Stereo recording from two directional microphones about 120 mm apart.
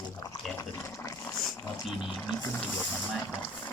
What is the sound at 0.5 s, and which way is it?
Fill, 25° left (ahead or behind).